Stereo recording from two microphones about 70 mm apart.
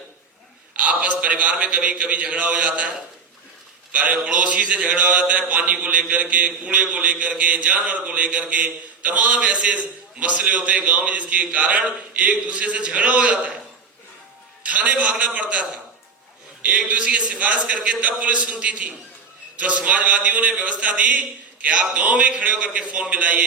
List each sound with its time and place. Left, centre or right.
0.8 s mantra: right
3.9 s mantra: right
14.6 s mantra: centre
16.6 s mantra: right
18.0 s a man's voice: centre
19.5 s mantra: right